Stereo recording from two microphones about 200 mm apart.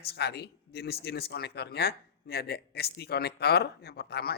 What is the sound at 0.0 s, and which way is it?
Speech, 55° left (ahead or behind).